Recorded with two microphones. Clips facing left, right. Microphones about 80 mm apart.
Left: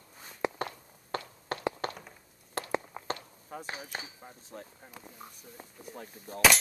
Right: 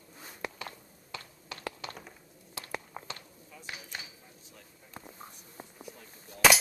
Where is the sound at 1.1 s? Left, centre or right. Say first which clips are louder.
Left 9 dB; left.